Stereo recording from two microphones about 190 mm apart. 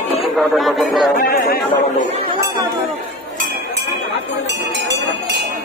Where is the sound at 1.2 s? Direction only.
55° left (ahead or behind).